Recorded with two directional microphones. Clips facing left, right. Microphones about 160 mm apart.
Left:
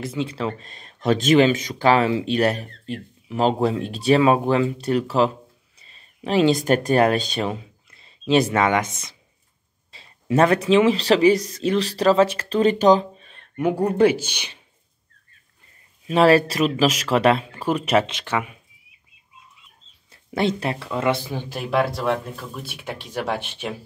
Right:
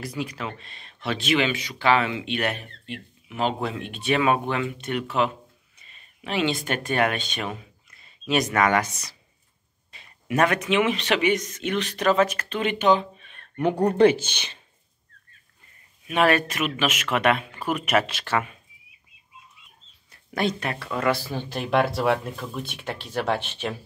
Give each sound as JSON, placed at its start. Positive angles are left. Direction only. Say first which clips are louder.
{"t": 0.0, "sound": "speech", "louder": "left 5 dB", "side_deg": 25}
{"t": 13.6, "sound": "speech", "louder": "even", "side_deg": 5}
{"t": 16.1, "sound": "speech", "louder": "left 6 dB", "side_deg": 30}
{"t": 20.1, "sound": "speech", "louder": "left 3 dB", "side_deg": 25}
{"t": 22.6, "sound": "speech", "louder": "even", "side_deg": 10}